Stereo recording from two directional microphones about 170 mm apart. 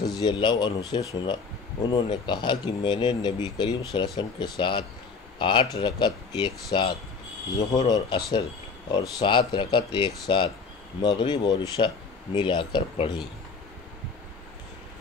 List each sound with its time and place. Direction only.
0.1 s speech: 25° left (ahead or behind)